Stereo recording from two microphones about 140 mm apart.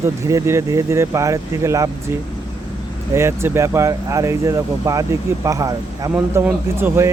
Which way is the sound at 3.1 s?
20° right (ahead or behind).